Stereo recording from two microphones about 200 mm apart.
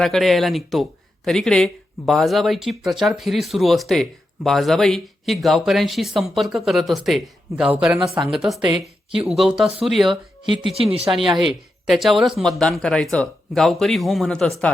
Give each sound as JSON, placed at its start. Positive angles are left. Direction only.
{"t": 0.0, "sound": "speech", "side_deg": 0}
{"t": 10.4, "sound": "speech", "side_deg": -25}
{"t": 10.8, "sound": "speech", "side_deg": -5}